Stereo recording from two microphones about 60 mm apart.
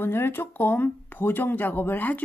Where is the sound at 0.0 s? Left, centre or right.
Left.